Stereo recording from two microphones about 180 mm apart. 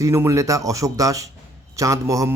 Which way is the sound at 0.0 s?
15° right (ahead or behind).